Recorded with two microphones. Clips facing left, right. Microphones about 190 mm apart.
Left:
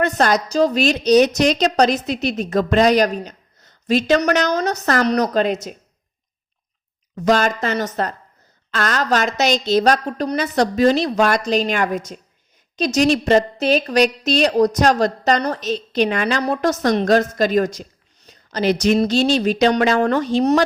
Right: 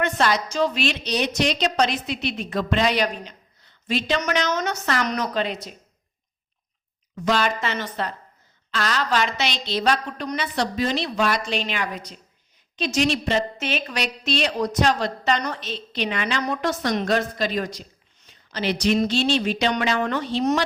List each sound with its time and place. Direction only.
0.0 s a woman's voice: 40° left (ahead or behind)
7.2 s a woman's voice: 45° left (ahead or behind)